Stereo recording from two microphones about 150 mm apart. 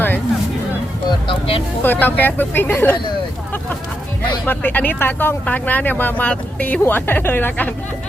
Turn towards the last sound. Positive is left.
turn(degrees=15)  # may be behind; listen again after turning